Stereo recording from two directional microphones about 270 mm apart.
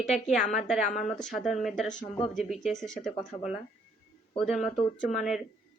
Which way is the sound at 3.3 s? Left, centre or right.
Centre.